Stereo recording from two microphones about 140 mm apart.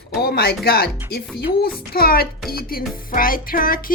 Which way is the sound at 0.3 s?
90° left.